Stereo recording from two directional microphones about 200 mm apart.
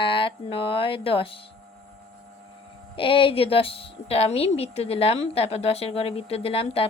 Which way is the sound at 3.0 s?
25° left (ahead or behind).